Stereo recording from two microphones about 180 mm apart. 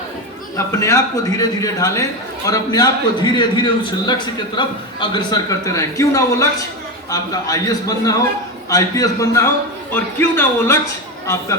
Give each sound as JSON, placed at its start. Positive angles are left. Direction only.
{"t": 0.5, "sound": "a man's voice", "side_deg": 15}